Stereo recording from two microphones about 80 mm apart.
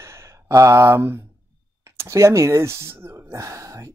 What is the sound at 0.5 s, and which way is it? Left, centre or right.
Speech, right.